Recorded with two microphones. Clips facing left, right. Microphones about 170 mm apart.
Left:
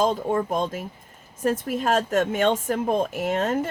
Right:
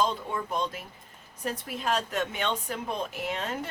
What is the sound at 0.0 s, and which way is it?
Speech, 45° left (ahead or behind).